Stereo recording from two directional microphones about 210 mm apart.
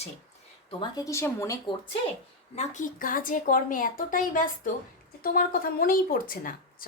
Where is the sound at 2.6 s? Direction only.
40° left (ahead or behind).